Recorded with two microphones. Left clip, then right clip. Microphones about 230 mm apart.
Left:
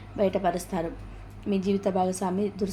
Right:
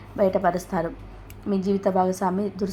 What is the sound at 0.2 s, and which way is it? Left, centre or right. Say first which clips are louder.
A woman's voice: right 4 dB; centre.